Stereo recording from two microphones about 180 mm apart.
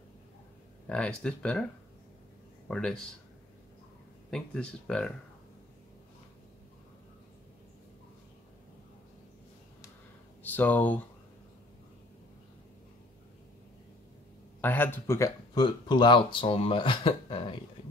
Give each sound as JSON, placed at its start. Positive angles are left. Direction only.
{"t": 0.8, "sound": "speech", "side_deg": 5}
{"t": 2.7, "sound": "speech", "side_deg": 5}
{"t": 4.3, "sound": "speech", "side_deg": 5}
{"t": 10.4, "sound": "speech", "side_deg": 10}
{"t": 14.6, "sound": "speech", "side_deg": 10}